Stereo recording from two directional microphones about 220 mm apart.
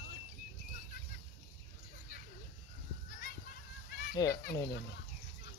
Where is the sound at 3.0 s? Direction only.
40° left (ahead or behind).